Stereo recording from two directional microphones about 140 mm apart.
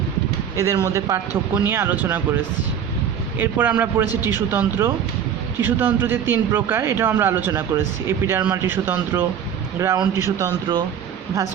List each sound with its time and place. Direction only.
0.5 s a man's voice: 20° right (ahead or behind)